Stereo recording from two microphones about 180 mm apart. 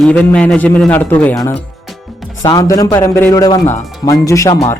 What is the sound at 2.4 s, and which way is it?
A man's voice, 20° left (ahead or behind).